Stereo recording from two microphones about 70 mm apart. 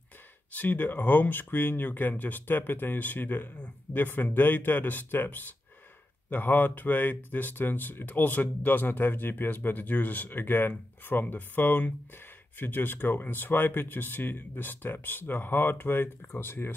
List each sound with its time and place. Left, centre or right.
0.5 s speech: left